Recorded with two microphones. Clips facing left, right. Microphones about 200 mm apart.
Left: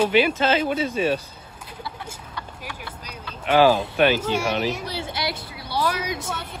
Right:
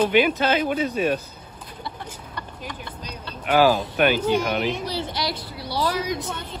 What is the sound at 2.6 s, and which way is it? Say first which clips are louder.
Vehicle: right 2 dB; 10° left (ahead or behind).